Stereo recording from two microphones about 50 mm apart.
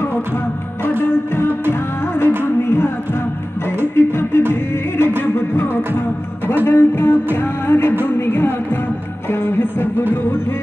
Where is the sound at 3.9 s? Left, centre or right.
Left.